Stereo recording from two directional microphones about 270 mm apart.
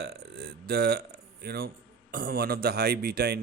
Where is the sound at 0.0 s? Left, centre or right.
Right.